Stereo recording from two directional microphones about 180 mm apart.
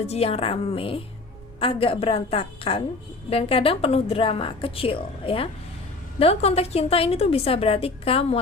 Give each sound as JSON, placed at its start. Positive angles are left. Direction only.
{"t": 0.0, "sound": "a woman's voice", "side_deg": 35}